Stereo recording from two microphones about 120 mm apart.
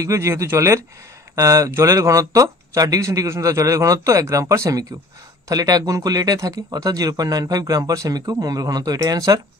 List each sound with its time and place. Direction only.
0.0 s speech: 25° right (ahead or behind)